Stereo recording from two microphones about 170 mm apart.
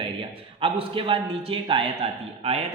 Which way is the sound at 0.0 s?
30° right (ahead or behind).